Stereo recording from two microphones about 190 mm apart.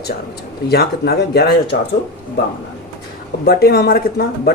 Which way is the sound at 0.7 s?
55° left (ahead or behind).